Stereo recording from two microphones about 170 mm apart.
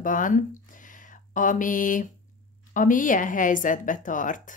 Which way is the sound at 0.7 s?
50° left (ahead or behind).